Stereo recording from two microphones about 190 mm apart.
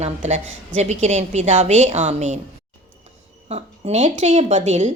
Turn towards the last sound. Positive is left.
turn(degrees=-40)  # may be behind; listen again after turning